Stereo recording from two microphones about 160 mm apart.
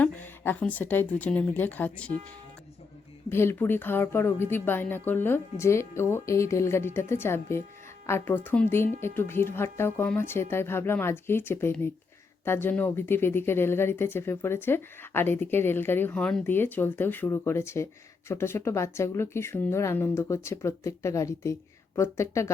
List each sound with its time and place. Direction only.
0.0 s a woman's voice: 10° left (ahead or behind)
3.2 s speech: 15° left (ahead or behind)